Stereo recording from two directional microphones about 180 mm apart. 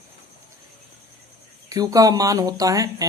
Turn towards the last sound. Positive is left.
turn(degrees=-20)  # may be behind; listen again after turning